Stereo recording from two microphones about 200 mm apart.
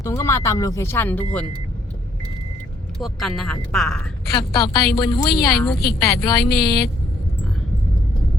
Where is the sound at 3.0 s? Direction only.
Centre (ahead or behind).